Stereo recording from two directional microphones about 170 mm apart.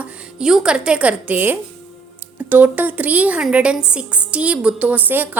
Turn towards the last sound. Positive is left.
turn(degrees=-10)  # may be behind; listen again after turning